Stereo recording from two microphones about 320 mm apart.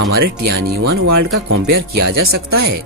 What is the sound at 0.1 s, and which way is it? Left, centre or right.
Speech, right.